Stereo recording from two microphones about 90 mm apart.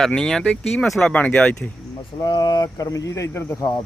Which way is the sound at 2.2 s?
55° left (ahead or behind).